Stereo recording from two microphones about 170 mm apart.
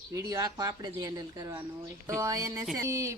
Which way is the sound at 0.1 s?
20° right (ahead or behind).